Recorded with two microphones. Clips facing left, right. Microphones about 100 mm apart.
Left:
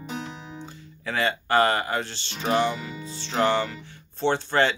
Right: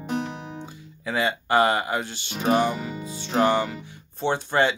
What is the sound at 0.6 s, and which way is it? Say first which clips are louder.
Music: right 2 dB; 10° right (ahead or behind).